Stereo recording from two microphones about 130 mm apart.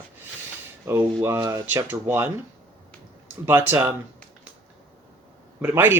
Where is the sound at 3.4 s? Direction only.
15° right (ahead or behind).